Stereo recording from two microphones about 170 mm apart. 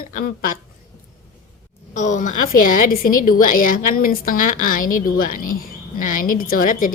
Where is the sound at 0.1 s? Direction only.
55° left (ahead or behind).